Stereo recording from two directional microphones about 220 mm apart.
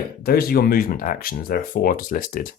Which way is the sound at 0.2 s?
45° left (ahead or behind).